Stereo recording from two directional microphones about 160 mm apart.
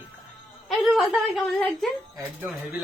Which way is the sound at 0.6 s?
Centre (ahead or behind).